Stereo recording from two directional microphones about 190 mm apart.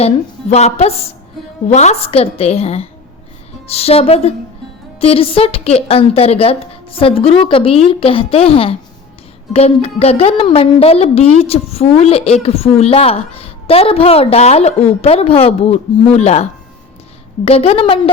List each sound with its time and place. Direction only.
0.5 s a woman's voice: 35° left (ahead or behind)